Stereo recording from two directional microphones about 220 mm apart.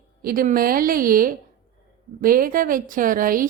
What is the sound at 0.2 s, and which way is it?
A woman's voice, 40° right (ahead or behind).